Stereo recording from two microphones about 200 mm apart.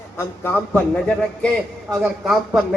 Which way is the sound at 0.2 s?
10° left (ahead or behind).